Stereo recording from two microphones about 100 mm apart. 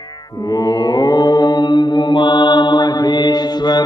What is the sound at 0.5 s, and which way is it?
Mantra, 40° left (ahead or behind).